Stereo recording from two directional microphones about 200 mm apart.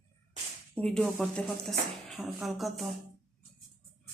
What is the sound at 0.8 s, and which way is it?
Speech, 5° left (ahead or behind).